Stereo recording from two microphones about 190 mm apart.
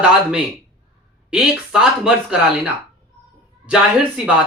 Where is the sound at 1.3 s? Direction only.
5° right (ahead or behind).